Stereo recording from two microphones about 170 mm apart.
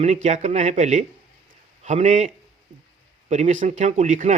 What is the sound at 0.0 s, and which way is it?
Speech, 40° right (ahead or behind).